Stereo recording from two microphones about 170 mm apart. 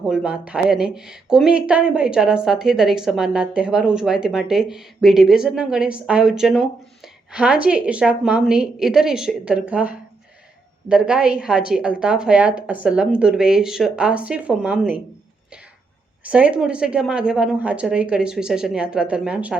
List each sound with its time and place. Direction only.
0.1 s speech: 5° right (ahead or behind)
16.2 s speech: 5° right (ahead or behind)